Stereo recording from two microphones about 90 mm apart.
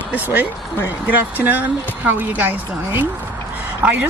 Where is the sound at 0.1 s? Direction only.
20° right (ahead or behind).